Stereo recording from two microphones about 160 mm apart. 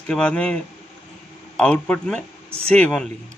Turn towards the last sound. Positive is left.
turn(degrees=5)  # may be behind; listen again after turning